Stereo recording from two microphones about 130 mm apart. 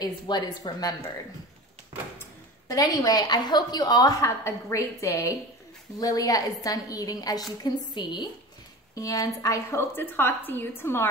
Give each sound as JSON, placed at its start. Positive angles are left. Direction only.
{"t": 0.0, "sound": "speech", "side_deg": 30}
{"t": 2.7, "sound": "a woman's voice", "side_deg": 25}